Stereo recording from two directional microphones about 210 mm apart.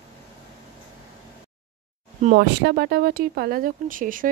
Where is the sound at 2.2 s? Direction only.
45° right (ahead or behind).